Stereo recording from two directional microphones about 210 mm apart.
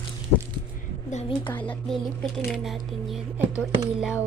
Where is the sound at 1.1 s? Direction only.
25° left (ahead or behind).